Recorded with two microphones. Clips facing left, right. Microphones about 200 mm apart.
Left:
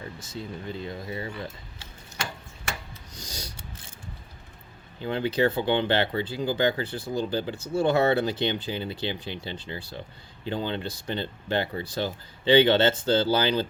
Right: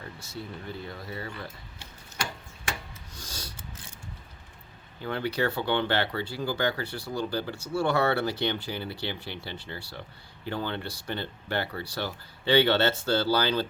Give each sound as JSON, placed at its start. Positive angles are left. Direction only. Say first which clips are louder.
{"t": 0.0, "sound": "speech", "louder": "left 3 dB", "side_deg": 20}
{"t": 3.2, "sound": "a sound", "louder": "left 2 dB", "side_deg": 15}
{"t": 4.9, "sound": "speech", "louder": "left 4 dB", "side_deg": 20}